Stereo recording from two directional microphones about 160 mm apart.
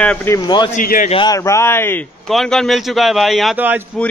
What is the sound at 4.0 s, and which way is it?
Speech, 5° left (ahead or behind).